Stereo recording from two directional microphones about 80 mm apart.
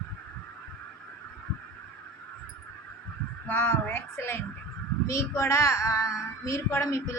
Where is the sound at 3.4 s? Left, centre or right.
Left.